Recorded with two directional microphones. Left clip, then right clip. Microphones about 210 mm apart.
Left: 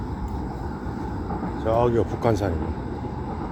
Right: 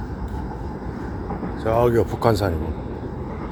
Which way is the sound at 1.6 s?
20° right (ahead or behind).